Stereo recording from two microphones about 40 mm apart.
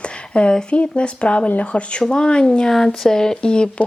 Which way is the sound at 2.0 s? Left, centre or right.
Centre.